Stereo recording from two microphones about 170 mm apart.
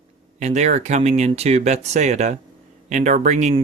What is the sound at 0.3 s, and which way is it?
Speech, 45° right (ahead or behind).